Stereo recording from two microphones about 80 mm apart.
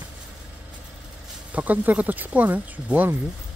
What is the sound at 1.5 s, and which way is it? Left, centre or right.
Speech, centre.